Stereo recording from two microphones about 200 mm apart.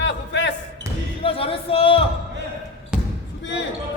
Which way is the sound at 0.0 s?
60° left (ahead or behind).